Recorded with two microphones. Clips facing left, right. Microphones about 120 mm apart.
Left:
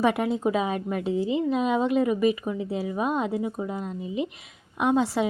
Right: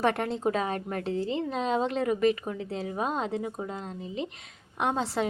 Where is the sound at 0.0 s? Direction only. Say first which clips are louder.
Left 3 dB; 10° left (ahead or behind).